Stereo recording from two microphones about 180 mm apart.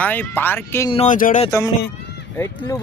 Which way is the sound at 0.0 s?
10° left (ahead or behind).